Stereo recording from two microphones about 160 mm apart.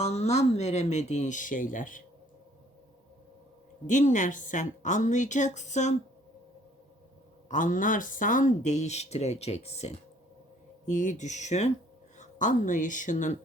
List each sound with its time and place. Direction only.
0.0 s speech: 45° left (ahead or behind)
3.8 s speech: 50° left (ahead or behind)
7.4 s speech: 55° left (ahead or behind)